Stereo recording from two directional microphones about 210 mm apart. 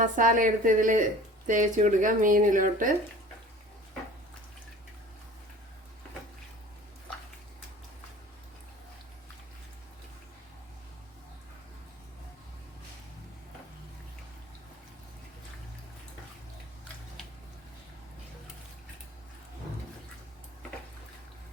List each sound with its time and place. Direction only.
0.0 s speech: 40° right (ahead or behind)